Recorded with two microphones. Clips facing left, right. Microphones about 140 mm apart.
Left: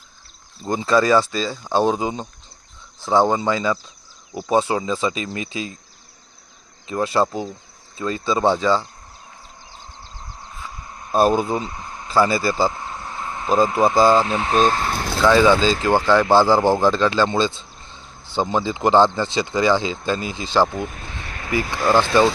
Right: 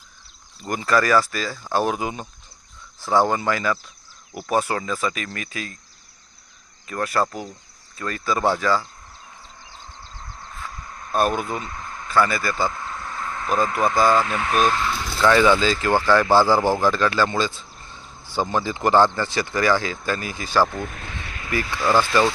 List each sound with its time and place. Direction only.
0.7 s speech: 20° left (ahead or behind)
6.8 s speech: 25° left (ahead or behind)
10.4 s a sound: 10° left (ahead or behind)
11.1 s speech: 30° left (ahead or behind)
12.0 s vehicle: 30° left (ahead or behind)
13.7 s speech: 25° left (ahead or behind)
15.2 s speech: 15° left (ahead or behind)
20.7 s speech: 5° left (ahead or behind)
21.2 s a sound: 35° left (ahead or behind)